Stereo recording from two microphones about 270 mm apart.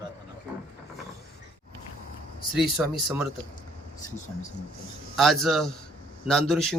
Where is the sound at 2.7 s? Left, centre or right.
Centre.